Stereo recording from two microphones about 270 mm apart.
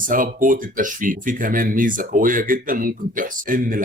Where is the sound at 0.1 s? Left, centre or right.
Right.